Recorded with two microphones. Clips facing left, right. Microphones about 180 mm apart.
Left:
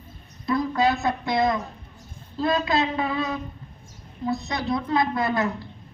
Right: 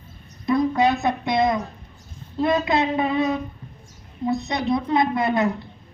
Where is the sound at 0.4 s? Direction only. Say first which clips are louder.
Right 3 dB; 20° right (ahead or behind).